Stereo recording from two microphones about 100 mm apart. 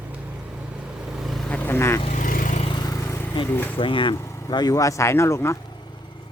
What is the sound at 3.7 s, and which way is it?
Speech, 60° left (ahead or behind).